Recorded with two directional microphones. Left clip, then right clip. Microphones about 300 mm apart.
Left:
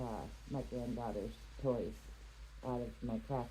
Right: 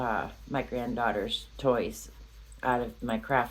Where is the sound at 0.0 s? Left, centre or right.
Right.